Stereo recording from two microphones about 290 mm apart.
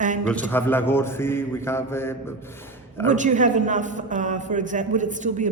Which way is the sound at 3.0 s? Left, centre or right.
Right.